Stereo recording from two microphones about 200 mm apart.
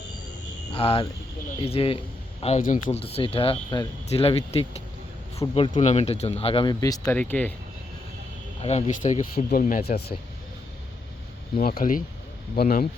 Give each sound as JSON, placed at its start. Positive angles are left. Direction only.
{"t": 0.8, "sound": "speech", "side_deg": 30}
{"t": 3.0, "sound": "speech", "side_deg": 30}
{"t": 8.6, "sound": "speech", "side_deg": 35}
{"t": 11.5, "sound": "speech", "side_deg": 45}